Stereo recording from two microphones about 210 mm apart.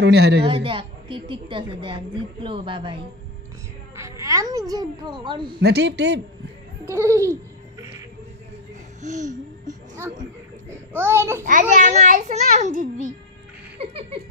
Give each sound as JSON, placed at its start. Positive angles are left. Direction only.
{"t": 0.0, "sound": "a man's voice", "side_deg": -50}
{"t": 0.5, "sound": "a woman's voice", "side_deg": -25}
{"t": 5.6, "sound": "a man's voice", "side_deg": -50}
{"t": 6.9, "sound": "a child's voice", "side_deg": -15}
{"t": 9.0, "sound": "music", "side_deg": -35}
{"t": 11.0, "sound": "a child's voice", "side_deg": -10}
{"t": 11.4, "sound": "a child's voice", "side_deg": -35}